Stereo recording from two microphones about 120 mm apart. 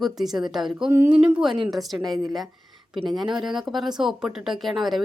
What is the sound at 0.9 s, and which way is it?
Speech, 20° right (ahead or behind).